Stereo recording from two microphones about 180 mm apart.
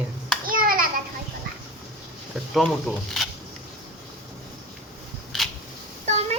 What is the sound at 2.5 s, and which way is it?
Speech, centre (ahead or behind).